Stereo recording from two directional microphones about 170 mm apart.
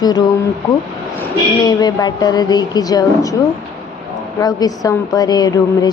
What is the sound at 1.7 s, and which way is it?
Speech, 25° left (ahead or behind).